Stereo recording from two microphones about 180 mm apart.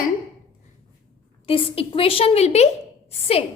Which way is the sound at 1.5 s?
30° left (ahead or behind).